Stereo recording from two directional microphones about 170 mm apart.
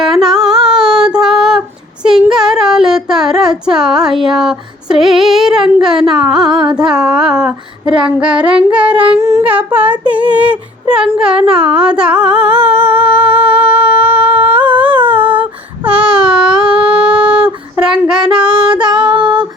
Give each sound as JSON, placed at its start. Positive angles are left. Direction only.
{"t": 0.0, "sound": "female singing", "side_deg": 0}
{"t": 2.0, "sound": "child singing", "side_deg": -5}
{"t": 6.7, "sound": "female singing", "side_deg": -5}
{"t": 9.1, "sound": "a sound", "side_deg": -15}
{"t": 13.0, "sound": "humming", "side_deg": -10}
{"t": 13.3, "sound": "humming", "side_deg": -30}
{"t": 13.7, "sound": "humming", "side_deg": -10}
{"t": 14.0, "sound": "humming", "side_deg": -35}
{"t": 14.3, "sound": "a sound", "side_deg": -10}
{"t": 18.1, "sound": "female singing", "side_deg": -5}
{"t": 19.1, "sound": "a sound", "side_deg": -25}